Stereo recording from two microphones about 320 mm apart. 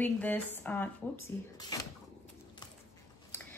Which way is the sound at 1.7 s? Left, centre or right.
Centre.